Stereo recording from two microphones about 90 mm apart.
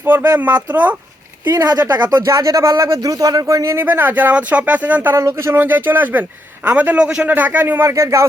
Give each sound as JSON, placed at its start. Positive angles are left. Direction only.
{"t": 0.0, "sound": "speech", "side_deg": -25}
{"t": 1.5, "sound": "speech", "side_deg": -45}
{"t": 5.1, "sound": "speech", "side_deg": -30}